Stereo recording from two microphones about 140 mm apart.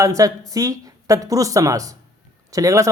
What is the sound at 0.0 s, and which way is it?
Speech, 25° right (ahead or behind).